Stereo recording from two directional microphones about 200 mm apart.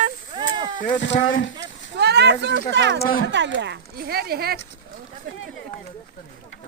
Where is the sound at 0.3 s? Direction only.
20° right (ahead or behind).